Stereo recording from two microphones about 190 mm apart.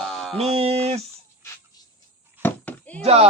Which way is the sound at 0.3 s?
30° right (ahead or behind).